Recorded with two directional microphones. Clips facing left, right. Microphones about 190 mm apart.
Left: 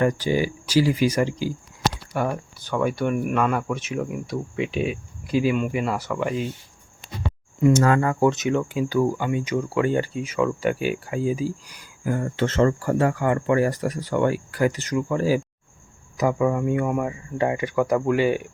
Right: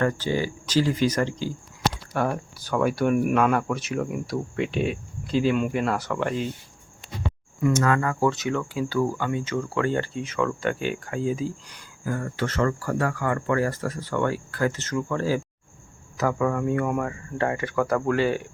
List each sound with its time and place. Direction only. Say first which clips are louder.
0.0 s speech: left 3 dB; 15° left (ahead or behind)
7.6 s speech: left 4 dB; 30° left (ahead or behind); by 12.1 s 10° left (ahead or behind)
12.1 s speech: left 4 dB; 25° left (ahead or behind)